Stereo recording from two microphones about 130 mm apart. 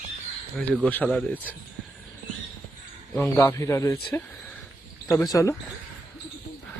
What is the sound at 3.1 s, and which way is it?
A man's voice, 15° left (ahead or behind).